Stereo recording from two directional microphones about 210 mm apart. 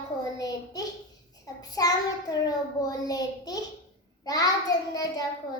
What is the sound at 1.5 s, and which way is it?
Child singing, 15° left (ahead or behind).